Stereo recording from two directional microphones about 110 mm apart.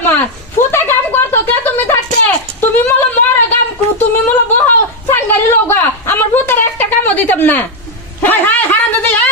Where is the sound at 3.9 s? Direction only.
15° left (ahead or behind).